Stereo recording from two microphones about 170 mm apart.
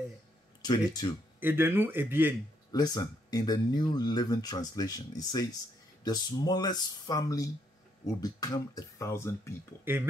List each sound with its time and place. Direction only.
0.6 s speech: 25° left (ahead or behind)
1.4 s a man's voice: 10° right (ahead or behind)
2.7 s speech: 25° left (ahead or behind)
9.9 s a man's voice: 10° right (ahead or behind)